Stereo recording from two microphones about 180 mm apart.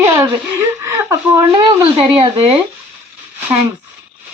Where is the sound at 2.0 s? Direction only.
30° right (ahead or behind).